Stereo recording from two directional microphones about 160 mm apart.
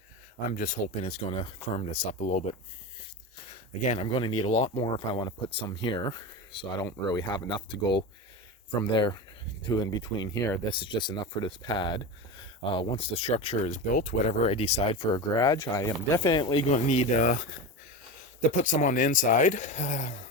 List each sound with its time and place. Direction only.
0.9 s speech: 40° left (ahead or behind)
1.9 s speech: 50° left (ahead or behind)
3.5 s speech: 35° left (ahead or behind); by 10.6 s 20° left (ahead or behind)
10.7 s speech: 30° left (ahead or behind)
13.9 s speech: 50° left (ahead or behind); by 16.6 s 30° left (ahead or behind)
16.6 s speech: 45° left (ahead or behind)